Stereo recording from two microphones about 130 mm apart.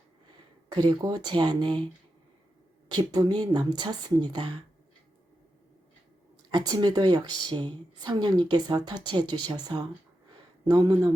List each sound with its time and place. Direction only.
0.7 s a woman's voice: 35° right (ahead or behind)
2.9 s a woman's voice: 30° right (ahead or behind)
6.5 s a woman's voice: 30° right (ahead or behind)